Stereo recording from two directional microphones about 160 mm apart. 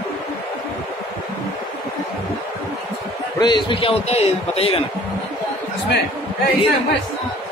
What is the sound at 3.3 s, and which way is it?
A man's voice, 30° left (ahead or behind).